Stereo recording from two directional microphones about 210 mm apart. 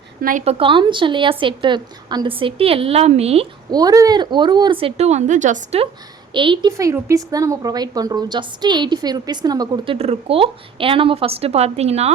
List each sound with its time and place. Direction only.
0.2 s a woman's voice: 40° right (ahead or behind)
0.6 s a woman's voice: 25° right (ahead or behind)
3.7 s a woman's voice: 20° right (ahead or behind)